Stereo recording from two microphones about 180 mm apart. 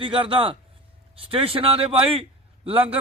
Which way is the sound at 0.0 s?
30° right (ahead or behind).